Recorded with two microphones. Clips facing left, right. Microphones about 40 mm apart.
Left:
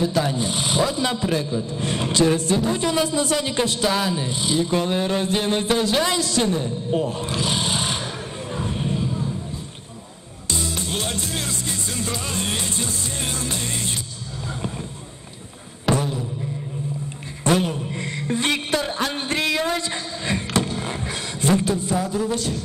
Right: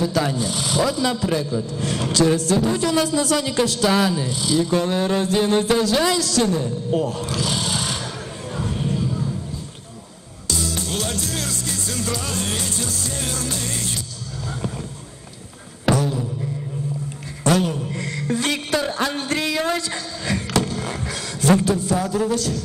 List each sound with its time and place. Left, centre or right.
0.3 s a man's voice: left
1.4 s a man's voice: left
1.7 s a man's voice: left
8.5 s music: left
10.5 s music: left
15.9 s beatboxing: centre
17.4 s a sound: left
17.9 s music: left
19.0 s speech: left
20.2 s a sound: left
21.5 s a man's voice: left